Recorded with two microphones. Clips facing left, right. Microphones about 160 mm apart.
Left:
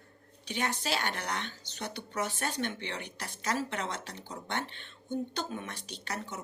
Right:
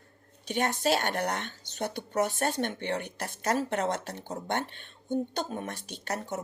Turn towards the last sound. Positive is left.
turn(degrees=-45)  # may be behind; listen again after turning